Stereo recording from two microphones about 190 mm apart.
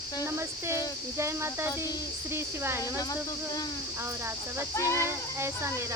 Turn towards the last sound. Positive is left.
turn(degrees=15)  # may be behind; listen again after turning